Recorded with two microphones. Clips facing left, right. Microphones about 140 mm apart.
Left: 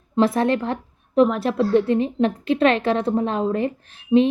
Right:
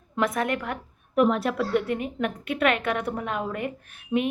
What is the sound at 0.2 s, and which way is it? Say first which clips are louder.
A woman's voice: left 7 dB; 30° left (ahead or behind).